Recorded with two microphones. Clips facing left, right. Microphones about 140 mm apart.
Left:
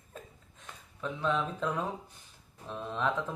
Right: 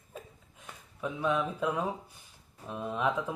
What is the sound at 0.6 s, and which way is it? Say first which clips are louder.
Speech: right 1 dB; 10° right (ahead or behind).